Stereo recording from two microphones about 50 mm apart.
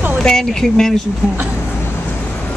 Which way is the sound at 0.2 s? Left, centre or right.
Centre.